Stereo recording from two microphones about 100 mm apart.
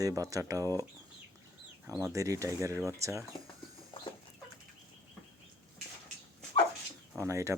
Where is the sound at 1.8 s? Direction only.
30° right (ahead or behind).